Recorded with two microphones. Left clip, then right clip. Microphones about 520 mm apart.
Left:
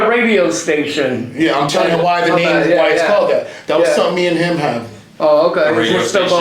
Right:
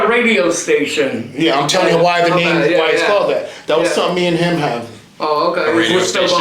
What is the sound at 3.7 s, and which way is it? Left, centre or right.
Speech, right.